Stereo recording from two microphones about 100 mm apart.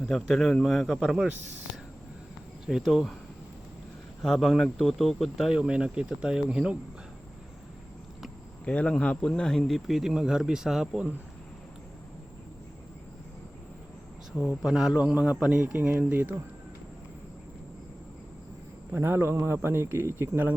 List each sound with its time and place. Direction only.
0.0 s speech: 5° left (ahead or behind)
2.6 s speech: centre (ahead or behind)
4.2 s speech: 5° left (ahead or behind)
8.6 s speech: 10° left (ahead or behind); by 11.1 s 5° right (ahead or behind)
14.3 s speech: 10° right (ahead or behind)
18.9 s speech: 20° right (ahead or behind)